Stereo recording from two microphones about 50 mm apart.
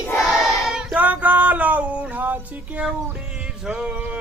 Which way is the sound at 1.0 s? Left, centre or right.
Right.